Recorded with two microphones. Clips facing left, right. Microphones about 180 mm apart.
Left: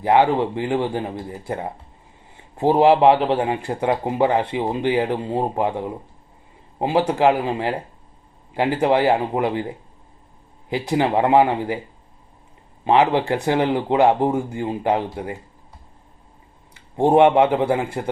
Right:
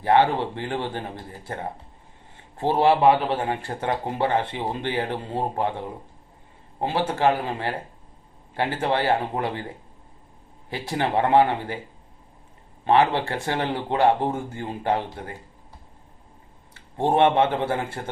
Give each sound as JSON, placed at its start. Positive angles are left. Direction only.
{"t": 0.0, "sound": "speech", "side_deg": 15}
{"t": 2.6, "sound": "speech", "side_deg": 15}
{"t": 7.0, "sound": "speech", "side_deg": 15}
{"t": 10.7, "sound": "speech", "side_deg": 15}
{"t": 12.8, "sound": "speech", "side_deg": 15}
{"t": 16.7, "sound": "speech", "side_deg": 15}